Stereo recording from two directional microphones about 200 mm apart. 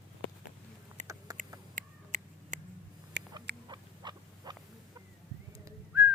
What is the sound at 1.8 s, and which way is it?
Finger snapping, 40° right (ahead or behind).